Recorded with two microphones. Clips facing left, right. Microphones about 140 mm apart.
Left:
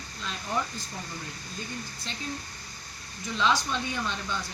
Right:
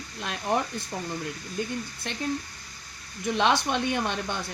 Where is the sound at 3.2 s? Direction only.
60° right (ahead or behind).